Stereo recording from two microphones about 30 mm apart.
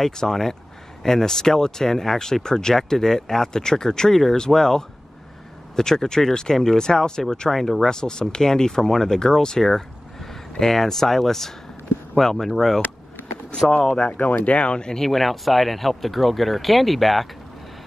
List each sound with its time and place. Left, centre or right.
0.2 s speech: centre
7.5 s speech: centre
7.9 s speech: left
14.1 s speech: left
14.6 s speech: left
15.0 s speech: centre